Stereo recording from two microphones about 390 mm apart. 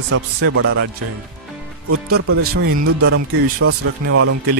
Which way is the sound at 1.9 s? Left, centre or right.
Right.